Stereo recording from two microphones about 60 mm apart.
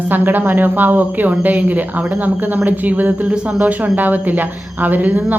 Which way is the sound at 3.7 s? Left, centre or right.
Right.